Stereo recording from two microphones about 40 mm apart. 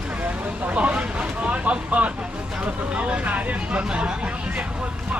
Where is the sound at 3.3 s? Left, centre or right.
Right.